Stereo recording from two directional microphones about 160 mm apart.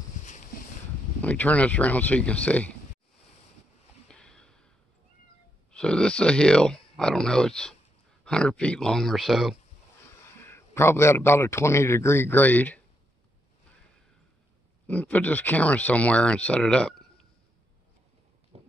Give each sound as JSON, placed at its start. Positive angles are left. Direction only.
{"t": 0.2, "sound": "a sound", "side_deg": 50}
{"t": 1.2, "sound": "speech", "side_deg": 10}
{"t": 4.1, "sound": "snort", "side_deg": 5}
{"t": 5.7, "sound": "speech", "side_deg": 5}
{"t": 10.2, "sound": "speech", "side_deg": 15}
{"t": 14.9, "sound": "speech", "side_deg": 10}
{"t": 18.5, "sound": "clip-clop", "side_deg": -40}